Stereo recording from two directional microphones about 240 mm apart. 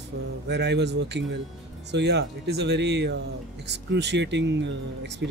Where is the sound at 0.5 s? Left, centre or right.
Right.